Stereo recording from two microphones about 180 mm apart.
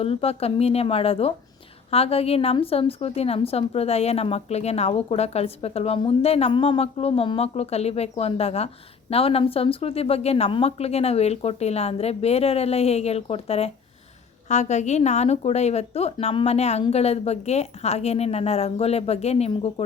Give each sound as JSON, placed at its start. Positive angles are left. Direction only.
{"t": 0.0, "sound": "a woman's voice", "side_deg": 30}